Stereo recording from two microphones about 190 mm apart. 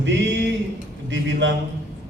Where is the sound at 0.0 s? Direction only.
70° right (ahead or behind).